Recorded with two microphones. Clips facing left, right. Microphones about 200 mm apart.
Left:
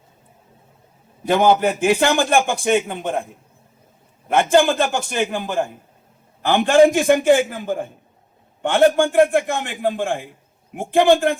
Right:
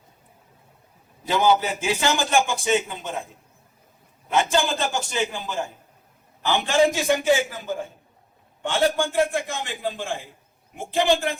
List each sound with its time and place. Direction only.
1.2 s a man's voice: 55° left (ahead or behind)
4.3 s a man's voice: 55° left (ahead or behind)